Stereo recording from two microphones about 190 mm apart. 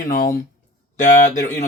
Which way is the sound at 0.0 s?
45° left (ahead or behind).